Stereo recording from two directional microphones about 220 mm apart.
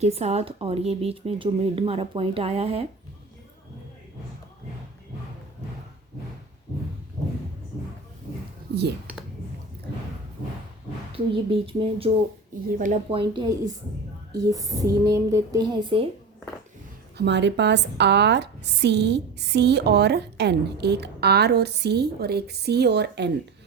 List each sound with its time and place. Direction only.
0.0 s speech: 30° right (ahead or behind)
8.7 s speech: 50° right (ahead or behind)
11.1 s speech: 25° right (ahead or behind)
17.2 s a woman's voice: 50° right (ahead or behind)